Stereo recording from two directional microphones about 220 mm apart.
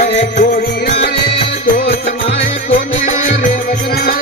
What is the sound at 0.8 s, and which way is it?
Music, 45° left (ahead or behind).